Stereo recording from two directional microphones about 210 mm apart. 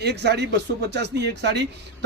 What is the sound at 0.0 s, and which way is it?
Speech, 55° right (ahead or behind).